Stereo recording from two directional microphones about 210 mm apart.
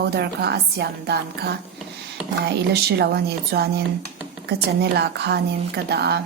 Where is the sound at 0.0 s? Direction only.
50° right (ahead or behind).